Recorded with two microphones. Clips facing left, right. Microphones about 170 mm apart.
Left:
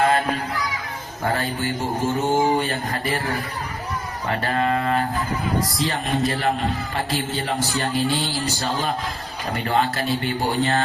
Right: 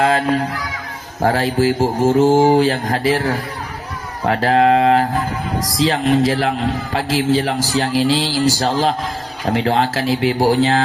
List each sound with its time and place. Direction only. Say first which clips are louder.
1.2 s a man's voice: right 9 dB; 90° right